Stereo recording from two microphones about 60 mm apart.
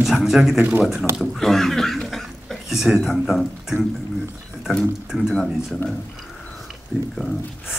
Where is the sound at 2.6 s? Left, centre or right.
Centre.